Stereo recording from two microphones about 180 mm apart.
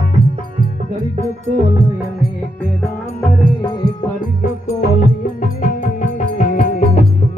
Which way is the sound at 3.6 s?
30° left (ahead or behind).